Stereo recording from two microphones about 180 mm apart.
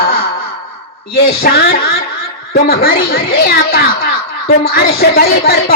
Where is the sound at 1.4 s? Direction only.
60° left (ahead or behind).